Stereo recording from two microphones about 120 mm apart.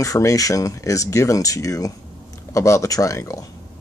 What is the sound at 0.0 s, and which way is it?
Speech, 25° left (ahead or behind).